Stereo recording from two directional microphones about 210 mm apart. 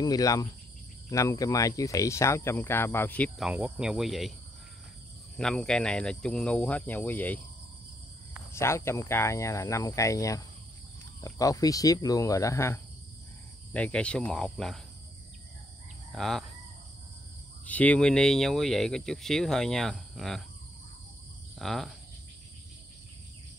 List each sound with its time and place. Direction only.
0.0 s speech: 15° left (ahead or behind); by 4.3 s centre (ahead or behind)
5.4 s speech: 5° left (ahead or behind)
8.5 s speech: 10° left (ahead or behind)
16.1 s speech: centre (ahead or behind)
17.6 s speech: 5° left (ahead or behind)
21.5 s speech: centre (ahead or behind)